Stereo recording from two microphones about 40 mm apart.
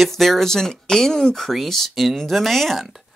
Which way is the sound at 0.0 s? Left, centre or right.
Centre.